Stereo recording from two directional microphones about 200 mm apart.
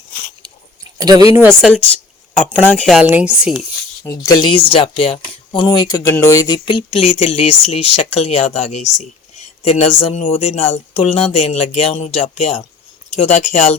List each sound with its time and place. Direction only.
0.9 s speech: 20° right (ahead or behind)
1.7 s speech: 5° left (ahead or behind)
2.8 s speech: 5° right (ahead or behind)
4.0 s speech: 20° left (ahead or behind); by 13.7 s 35° left (ahead or behind)